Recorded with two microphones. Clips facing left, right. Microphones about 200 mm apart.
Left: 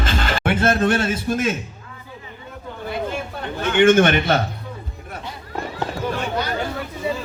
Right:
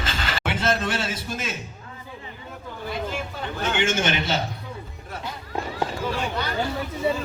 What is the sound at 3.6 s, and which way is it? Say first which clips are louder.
Speech: left 10 dB; 55° left (ahead or behind).